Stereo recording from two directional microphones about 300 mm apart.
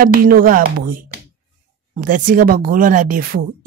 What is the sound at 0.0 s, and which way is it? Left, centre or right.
Speech, right.